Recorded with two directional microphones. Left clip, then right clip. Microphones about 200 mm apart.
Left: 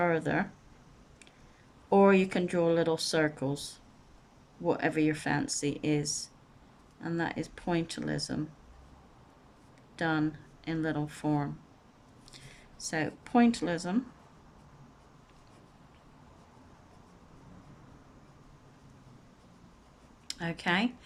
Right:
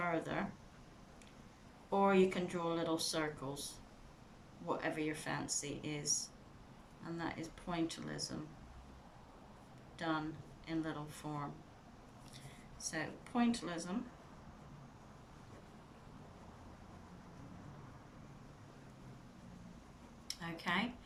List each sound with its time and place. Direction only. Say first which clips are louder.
0.0 s speech: left 10 dB; 45° left (ahead or behind)
1.9 s speech: left 8 dB; 45° left (ahead or behind)
9.9 s speech: left 9 dB; 45° left (ahead or behind)
12.8 s speech: left 9 dB; 45° left (ahead or behind)
20.2 s speech: left 9 dB; 45° left (ahead or behind)